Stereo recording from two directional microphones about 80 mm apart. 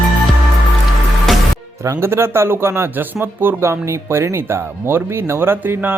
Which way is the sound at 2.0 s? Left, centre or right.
Right.